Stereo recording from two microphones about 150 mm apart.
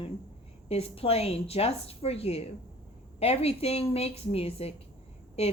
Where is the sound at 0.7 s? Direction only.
40° left (ahead or behind).